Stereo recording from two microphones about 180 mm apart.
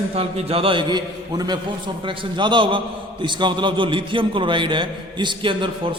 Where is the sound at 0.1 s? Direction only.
35° right (ahead or behind).